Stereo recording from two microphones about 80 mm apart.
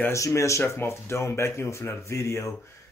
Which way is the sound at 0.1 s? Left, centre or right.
Left.